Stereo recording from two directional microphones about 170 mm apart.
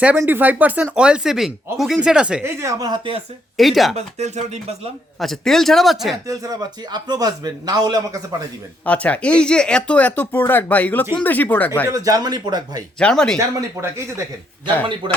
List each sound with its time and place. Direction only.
0.0 s speech: 10° right (ahead or behind); by 3.2 s 30° right (ahead or behind)
3.6 s speech: centre (ahead or behind)
3.9 s speech: 40° right (ahead or behind)
5.2 s speech: centre (ahead or behind)
6.2 s speech: 20° right (ahead or behind)
8.8 s speech: 10° left (ahead or behind)
11.9 s speech: 20° right (ahead or behind)
13.0 s speech: 5° left (ahead or behind)